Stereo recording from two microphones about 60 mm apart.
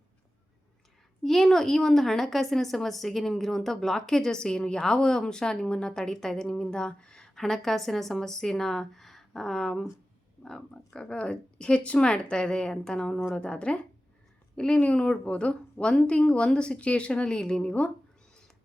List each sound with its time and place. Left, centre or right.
1.2 s a woman's voice: centre